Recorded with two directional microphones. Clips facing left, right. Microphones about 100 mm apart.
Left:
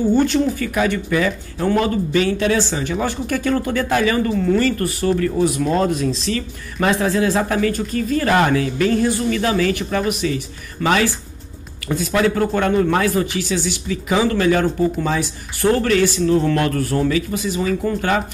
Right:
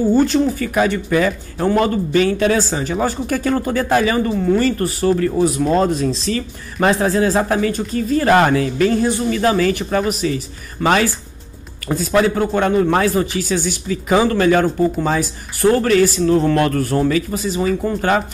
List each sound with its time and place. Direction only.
0.1 s speech: 35° right (ahead or behind)
13.5 s speech: 45° right (ahead or behind)